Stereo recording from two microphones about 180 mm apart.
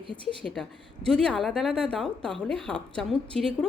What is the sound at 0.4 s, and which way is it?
A woman's voice, centre (ahead or behind).